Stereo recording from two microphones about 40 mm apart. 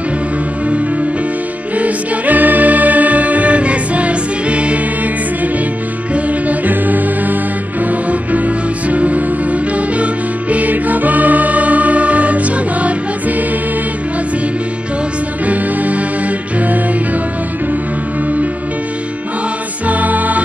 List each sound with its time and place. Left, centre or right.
1.8 s music: right
6.1 s music: right
15.4 s music: right
19.9 s music: right